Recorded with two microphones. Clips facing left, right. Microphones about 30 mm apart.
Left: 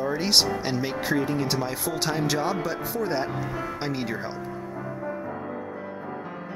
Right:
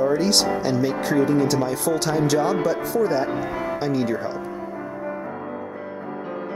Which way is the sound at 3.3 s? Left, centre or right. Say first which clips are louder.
Right 5 dB; right.